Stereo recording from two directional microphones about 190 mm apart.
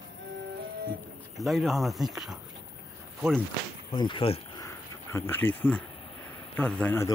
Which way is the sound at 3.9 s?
25° left (ahead or behind).